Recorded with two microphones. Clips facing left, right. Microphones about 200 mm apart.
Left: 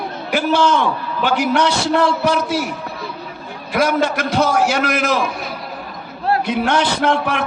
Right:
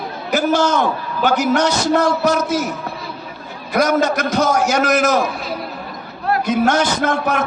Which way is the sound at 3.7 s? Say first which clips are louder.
Right 1 dB; 45° right (ahead or behind).